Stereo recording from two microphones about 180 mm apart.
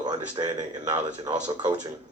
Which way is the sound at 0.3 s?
25° right (ahead or behind).